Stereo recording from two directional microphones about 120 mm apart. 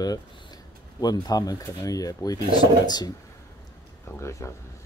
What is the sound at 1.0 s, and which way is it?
Speech, 35° left (ahead or behind).